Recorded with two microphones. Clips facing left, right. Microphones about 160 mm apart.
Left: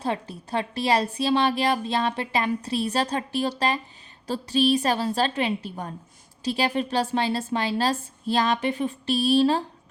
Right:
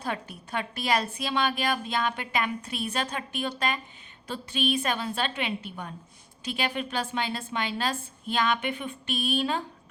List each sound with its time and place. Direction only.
0.0 s a woman's voice: 30° left (ahead or behind)